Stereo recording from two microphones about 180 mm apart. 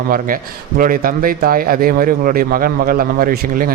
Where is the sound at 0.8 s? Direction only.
50° right (ahead or behind).